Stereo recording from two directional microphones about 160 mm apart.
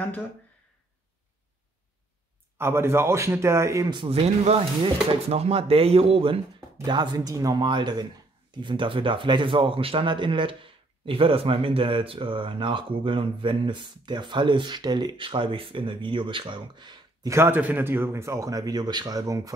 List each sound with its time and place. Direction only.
2.5 s speech: 15° right (ahead or behind)
4.0 s speech: 40° right (ahead or behind); by 19.5 s 20° right (ahead or behind)